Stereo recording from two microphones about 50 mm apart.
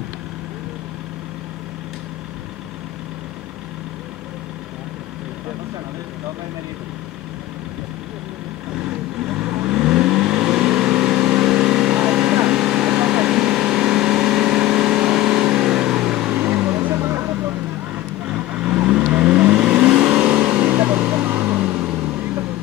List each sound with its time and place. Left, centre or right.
9.2 s vehicle: right
16.3 s vehicle: right
16.9 s vehicle: right
17.3 s vehicle: right
18.5 s vehicle: right
20.6 s vehicle: right